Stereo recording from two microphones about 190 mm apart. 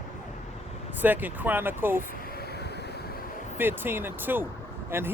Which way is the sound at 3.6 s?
10° right (ahead or behind).